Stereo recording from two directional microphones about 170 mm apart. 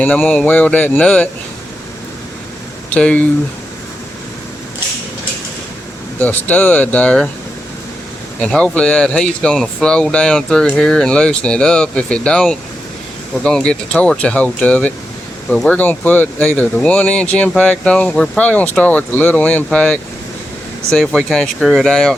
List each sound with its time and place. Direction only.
0.0 s speech: 10° left (ahead or behind)
2.9 s speech: 5° left (ahead or behind)
6.1 s speech: 10° left (ahead or behind)
8.4 s speech: 5° left (ahead or behind)